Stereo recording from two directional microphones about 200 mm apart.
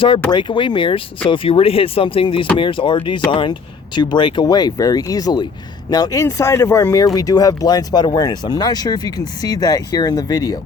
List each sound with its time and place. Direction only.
0.3 s speech: 25° left (ahead or behind)